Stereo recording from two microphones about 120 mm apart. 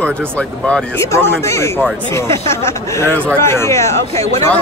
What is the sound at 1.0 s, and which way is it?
Speech, 25° left (ahead or behind).